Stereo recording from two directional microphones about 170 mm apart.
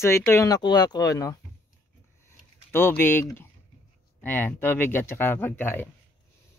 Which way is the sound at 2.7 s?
15° left (ahead or behind).